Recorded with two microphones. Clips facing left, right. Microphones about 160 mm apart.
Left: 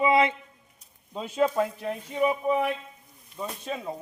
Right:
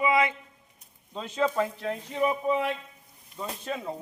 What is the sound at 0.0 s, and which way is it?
Speech, 25° left (ahead or behind).